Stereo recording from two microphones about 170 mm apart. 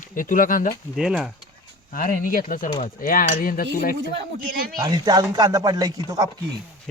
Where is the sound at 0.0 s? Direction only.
50° left (ahead or behind).